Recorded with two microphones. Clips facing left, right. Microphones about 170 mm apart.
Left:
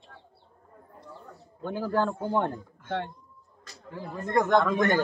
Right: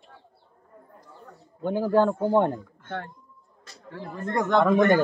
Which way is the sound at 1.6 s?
15° right (ahead or behind).